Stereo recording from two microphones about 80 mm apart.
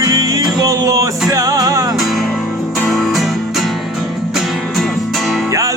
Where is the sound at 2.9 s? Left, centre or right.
Centre.